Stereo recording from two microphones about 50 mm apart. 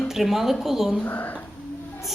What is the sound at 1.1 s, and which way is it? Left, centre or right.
Speech, left.